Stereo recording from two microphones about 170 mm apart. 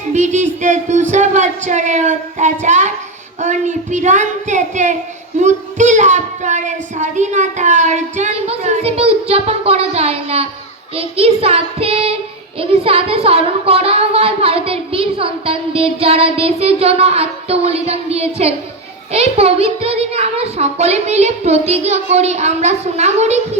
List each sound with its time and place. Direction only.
0.1 s speech: 45° right (ahead or behind)
10.9 s child singing: 35° right (ahead or behind)